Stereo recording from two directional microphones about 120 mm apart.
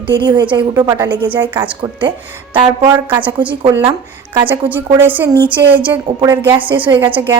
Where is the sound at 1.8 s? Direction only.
45° right (ahead or behind).